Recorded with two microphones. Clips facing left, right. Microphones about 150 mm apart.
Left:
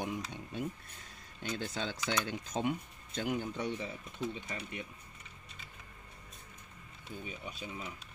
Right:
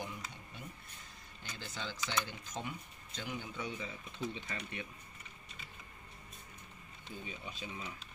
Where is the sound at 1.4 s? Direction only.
65° left (ahead or behind).